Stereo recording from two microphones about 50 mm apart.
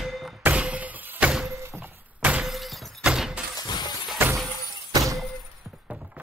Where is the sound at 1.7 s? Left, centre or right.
Right.